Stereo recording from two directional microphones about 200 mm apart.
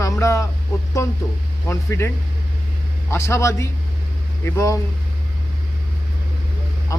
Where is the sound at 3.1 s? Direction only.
15° left (ahead or behind).